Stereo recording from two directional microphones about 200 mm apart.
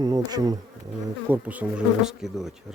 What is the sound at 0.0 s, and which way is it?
Bee, 20° right (ahead or behind).